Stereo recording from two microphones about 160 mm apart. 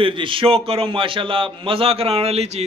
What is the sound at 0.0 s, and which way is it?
A man's voice, 30° right (ahead or behind).